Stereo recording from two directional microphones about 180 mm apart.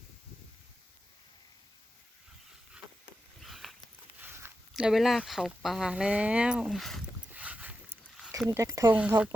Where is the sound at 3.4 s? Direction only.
Centre (ahead or behind).